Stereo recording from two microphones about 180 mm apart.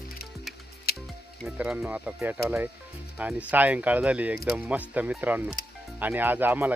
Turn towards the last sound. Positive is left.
turn(degrees=-10)  # may be behind; listen again after turning